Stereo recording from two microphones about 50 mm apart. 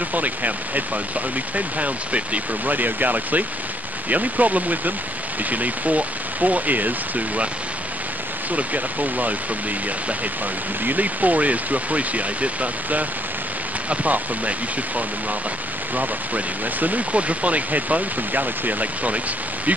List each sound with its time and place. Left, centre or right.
0.1 s speech: right
8.5 s speech: right
10.8 s speech: right
13.8 s speech: right
15.9 s speech: right